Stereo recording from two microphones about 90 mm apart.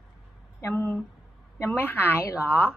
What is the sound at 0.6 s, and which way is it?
A woman's voice, 30° left (ahead or behind).